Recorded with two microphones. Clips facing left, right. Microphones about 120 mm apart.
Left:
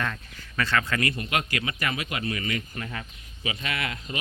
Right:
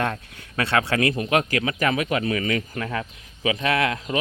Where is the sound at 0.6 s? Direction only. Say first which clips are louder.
Right 5 dB; 65° right (ahead or behind); by 1.2 s 85° right.